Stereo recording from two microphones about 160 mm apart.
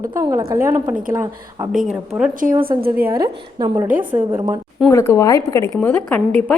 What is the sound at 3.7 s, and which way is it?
Speech, 10° right (ahead or behind).